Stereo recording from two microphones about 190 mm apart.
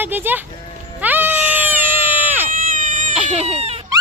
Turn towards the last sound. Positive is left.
turn(degrees=-35)  # may be behind; listen again after turning